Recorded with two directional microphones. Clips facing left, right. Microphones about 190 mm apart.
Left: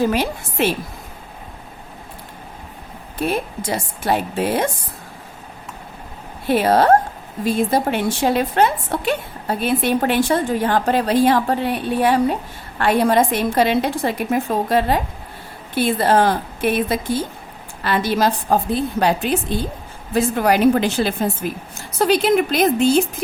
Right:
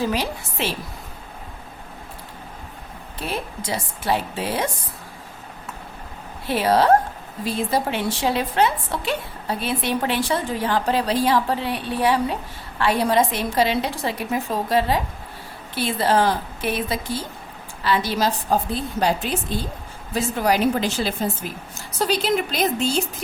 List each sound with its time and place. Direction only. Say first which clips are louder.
0.0 s a woman's voice: left 5 dB; 50° left (ahead or behind)
3.2 s a woman's voice: left 7 dB; 50° left (ahead or behind)
6.5 s a woman's voice: left 3 dB; 50° left (ahead or behind)